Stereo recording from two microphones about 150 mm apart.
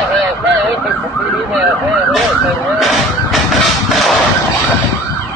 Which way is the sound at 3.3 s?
Centre (ahead or behind).